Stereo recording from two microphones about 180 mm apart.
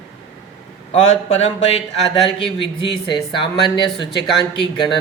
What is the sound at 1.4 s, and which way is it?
Speech, 35° left (ahead or behind).